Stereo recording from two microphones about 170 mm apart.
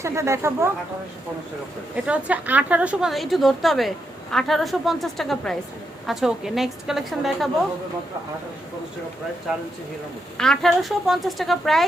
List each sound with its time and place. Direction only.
0.0 s speech: 15° right (ahead or behind)
2.0 s a woman's voice: 10° right (ahead or behind)
9.5 s a woman's voice: centre (ahead or behind)